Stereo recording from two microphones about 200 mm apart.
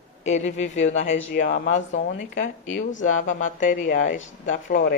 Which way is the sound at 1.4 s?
45° left (ahead or behind).